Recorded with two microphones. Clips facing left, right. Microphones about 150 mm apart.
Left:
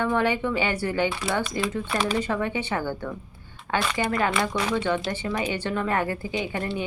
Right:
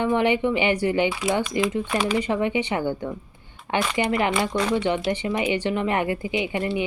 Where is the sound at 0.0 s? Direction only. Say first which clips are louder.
Right 3 dB; 15° right (ahead or behind).